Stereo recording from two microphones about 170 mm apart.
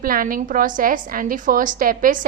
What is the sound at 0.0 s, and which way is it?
A woman's voice, 55° right (ahead or behind).